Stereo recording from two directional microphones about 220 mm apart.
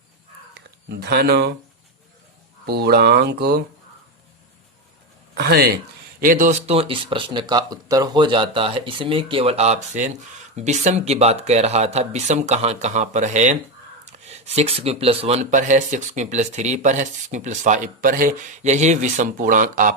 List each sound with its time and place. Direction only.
0.9 s speech: 50° right (ahead or behind)
2.6 s speech: 45° right (ahead or behind)
5.3 s speech: 45° right (ahead or behind)